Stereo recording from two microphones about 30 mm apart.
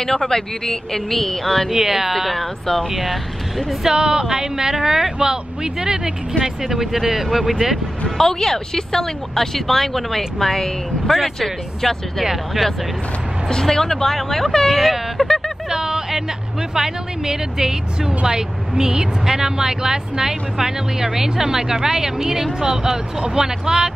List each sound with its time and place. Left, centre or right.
0.0 s speech: centre
1.7 s speech: centre
2.6 s speech: centre
2.9 s speech: centre
3.9 s speech: right
6.6 s speech: centre
8.2 s speech: centre
11.1 s speech: centre
11.3 s speech: centre
13.5 s speech: centre
15.2 s speech: centre
15.7 s speech: right